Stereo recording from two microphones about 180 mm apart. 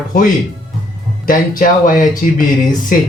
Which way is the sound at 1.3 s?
50° left (ahead or behind).